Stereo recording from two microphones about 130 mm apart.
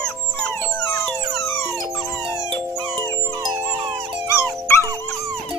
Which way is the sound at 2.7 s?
35° right (ahead or behind).